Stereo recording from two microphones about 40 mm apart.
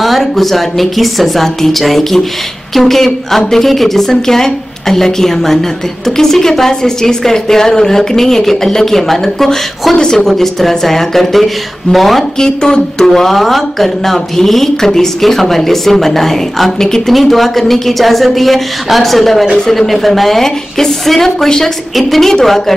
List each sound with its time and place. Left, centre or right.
0.0 s a woman's voice: centre
10.2 s speech: centre
12.4 s a woman's voice: centre